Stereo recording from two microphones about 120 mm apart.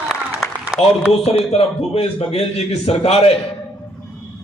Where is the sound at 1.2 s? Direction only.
60° left (ahead or behind).